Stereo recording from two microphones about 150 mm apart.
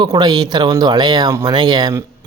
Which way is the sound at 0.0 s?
25° right (ahead or behind).